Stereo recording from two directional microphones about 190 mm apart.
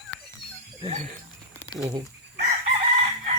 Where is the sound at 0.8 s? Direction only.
35° right (ahead or behind).